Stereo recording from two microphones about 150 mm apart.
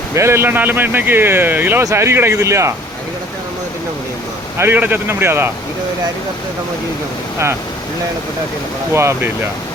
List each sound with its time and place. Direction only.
0.1 s speech: 20° right (ahead or behind)
4.5 s speech: 15° right (ahead or behind)
8.9 s speech: 15° right (ahead or behind)